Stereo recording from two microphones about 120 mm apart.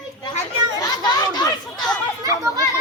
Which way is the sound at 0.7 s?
35° left (ahead or behind).